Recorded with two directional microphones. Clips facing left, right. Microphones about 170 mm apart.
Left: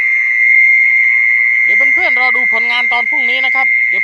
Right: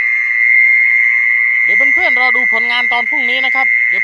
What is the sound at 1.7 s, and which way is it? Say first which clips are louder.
Speech: right 1 dB; 5° left (ahead or behind).